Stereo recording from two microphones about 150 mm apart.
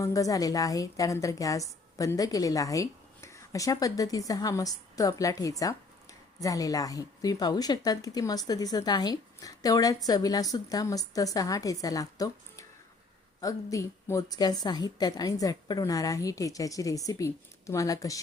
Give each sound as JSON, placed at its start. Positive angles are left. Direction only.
{"t": 0.0, "sound": "a woman's voice", "side_deg": 20}